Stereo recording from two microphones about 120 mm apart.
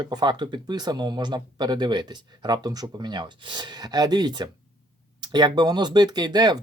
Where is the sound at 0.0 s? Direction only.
35° right (ahead or behind).